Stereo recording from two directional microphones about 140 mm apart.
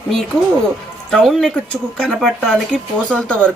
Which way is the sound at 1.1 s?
5° left (ahead or behind).